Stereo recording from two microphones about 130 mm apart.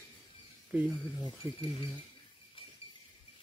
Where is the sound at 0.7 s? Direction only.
10° right (ahead or behind).